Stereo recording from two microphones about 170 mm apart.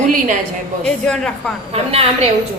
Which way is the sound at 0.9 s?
5° left (ahead or behind).